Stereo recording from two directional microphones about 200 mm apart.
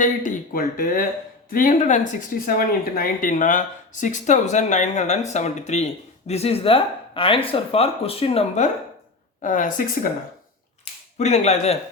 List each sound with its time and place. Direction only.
0.0 s speech: 40° left (ahead or behind)
11.2 s speech: 35° left (ahead or behind)